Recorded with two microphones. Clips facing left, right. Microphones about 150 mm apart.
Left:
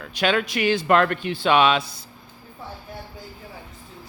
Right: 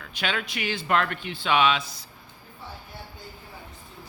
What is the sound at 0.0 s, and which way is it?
Speech, 40° left (ahead or behind).